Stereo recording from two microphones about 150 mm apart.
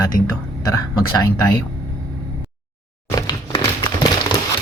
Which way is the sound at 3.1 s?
25° left (ahead or behind).